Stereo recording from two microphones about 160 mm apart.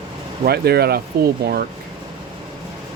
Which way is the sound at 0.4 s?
80° right.